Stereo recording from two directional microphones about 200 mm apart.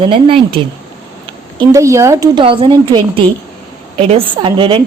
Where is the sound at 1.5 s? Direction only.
15° right (ahead or behind).